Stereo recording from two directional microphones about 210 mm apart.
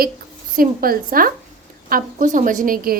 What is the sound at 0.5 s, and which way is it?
A woman's voice, 45° right (ahead or behind).